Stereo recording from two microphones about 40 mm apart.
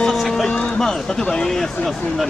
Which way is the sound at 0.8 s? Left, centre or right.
Centre.